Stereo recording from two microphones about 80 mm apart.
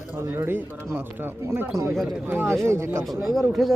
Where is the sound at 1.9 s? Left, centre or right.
Centre.